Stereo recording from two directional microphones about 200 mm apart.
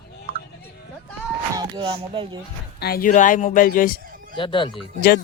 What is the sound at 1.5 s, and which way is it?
Speech, 25° right (ahead or behind).